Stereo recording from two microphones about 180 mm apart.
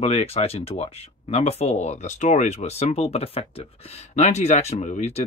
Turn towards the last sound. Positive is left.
turn(degrees=35)  # may be behind; listen again after turning